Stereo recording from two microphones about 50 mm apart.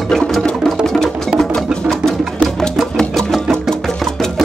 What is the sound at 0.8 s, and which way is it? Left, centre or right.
Wood block, centre.